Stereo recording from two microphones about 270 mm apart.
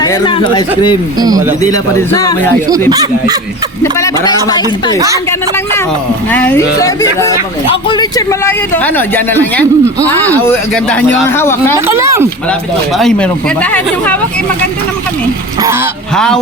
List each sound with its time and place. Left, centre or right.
0.0 s speech: centre
1.2 s speech: centre
1.7 s speech: centre
2.9 s speech: centre
3.9 s speech: centre
4.9 s speech: centre
6.3 s speech: centre
11.9 s speech: centre
13.0 s speech: centre
15.6 s speech: centre
16.1 s speech: centre